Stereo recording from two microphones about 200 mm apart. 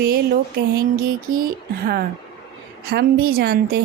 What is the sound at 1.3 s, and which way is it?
Speech, 45° right (ahead or behind).